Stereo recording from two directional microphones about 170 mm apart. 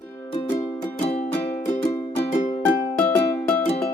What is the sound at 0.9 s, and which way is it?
Music, 40° left (ahead or behind).